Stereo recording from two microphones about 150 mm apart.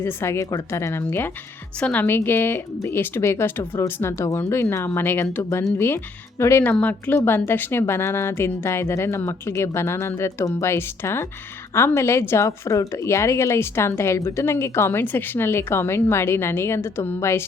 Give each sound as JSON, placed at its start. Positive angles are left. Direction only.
{"t": 0.0, "sound": "a woman's voice", "side_deg": 20}